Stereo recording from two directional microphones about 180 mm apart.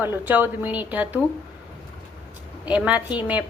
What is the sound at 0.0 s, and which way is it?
A woman's voice, 10° right (ahead or behind).